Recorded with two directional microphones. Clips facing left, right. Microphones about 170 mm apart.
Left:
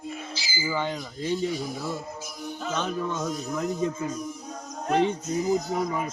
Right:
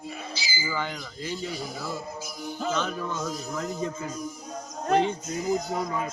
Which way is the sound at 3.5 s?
20° left (ahead or behind).